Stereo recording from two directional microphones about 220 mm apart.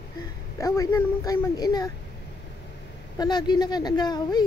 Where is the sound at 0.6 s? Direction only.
15° left (ahead or behind).